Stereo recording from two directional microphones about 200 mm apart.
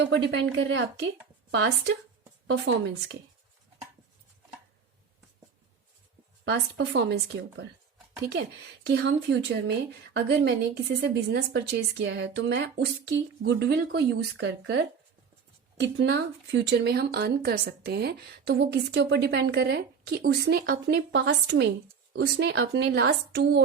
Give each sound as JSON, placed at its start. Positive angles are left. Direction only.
{"t": 0.0, "sound": "speech", "side_deg": -65}
{"t": 6.4, "sound": "speech", "side_deg": -55}
{"t": 15.8, "sound": "speech", "side_deg": -60}